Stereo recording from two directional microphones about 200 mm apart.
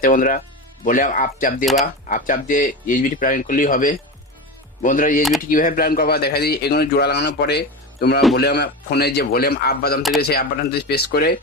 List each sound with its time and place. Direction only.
0.0 s a man's voice: 40° left (ahead or behind)